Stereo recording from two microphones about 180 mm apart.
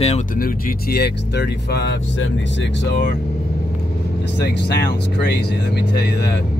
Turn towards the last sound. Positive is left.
turn(degrees=65)  # may be behind; listen again after turning